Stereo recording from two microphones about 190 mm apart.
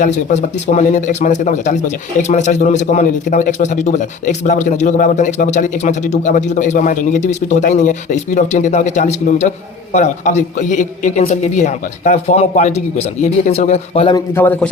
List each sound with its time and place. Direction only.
0.0 s a man's voice: 40° left (ahead or behind)
14.3 s a man's voice: 10° left (ahead or behind)